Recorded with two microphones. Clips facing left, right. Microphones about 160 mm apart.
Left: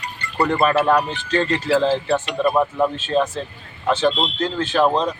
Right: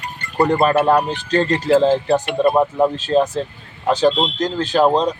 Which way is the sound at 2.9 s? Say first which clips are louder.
Right 4 dB; 40° right (ahead or behind).